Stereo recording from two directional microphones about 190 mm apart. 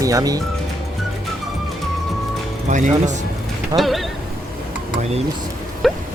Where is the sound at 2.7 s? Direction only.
40° right (ahead or behind).